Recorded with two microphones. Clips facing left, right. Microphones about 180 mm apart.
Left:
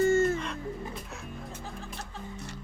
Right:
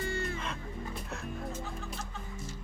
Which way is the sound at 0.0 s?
45° left (ahead or behind).